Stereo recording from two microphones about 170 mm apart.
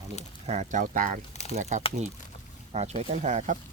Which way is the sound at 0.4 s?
40° right (ahead or behind).